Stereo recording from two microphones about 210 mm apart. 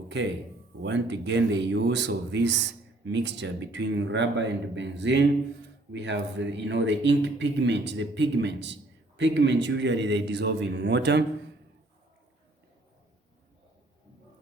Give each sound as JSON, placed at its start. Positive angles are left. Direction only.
{"t": 0.1, "sound": "speech", "side_deg": -55}